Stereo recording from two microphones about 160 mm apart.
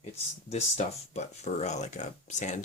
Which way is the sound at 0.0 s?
45° left (ahead or behind).